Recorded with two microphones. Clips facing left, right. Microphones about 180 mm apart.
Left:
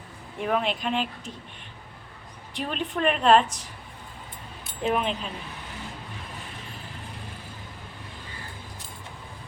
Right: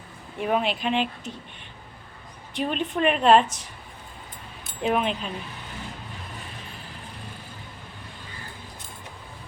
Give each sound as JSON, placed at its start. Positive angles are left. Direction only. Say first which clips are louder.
{"t": 0.4, "sound": "a woman's voice", "louder": "right 2 dB", "side_deg": -5}
{"t": 2.6, "sound": "a woman's voice", "louder": "right 3 dB", "side_deg": 0}
{"t": 4.8, "sound": "a woman's voice", "louder": "right 2 dB", "side_deg": -5}